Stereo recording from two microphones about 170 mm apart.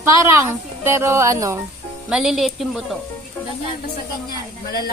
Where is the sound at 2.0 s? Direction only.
5° right (ahead or behind).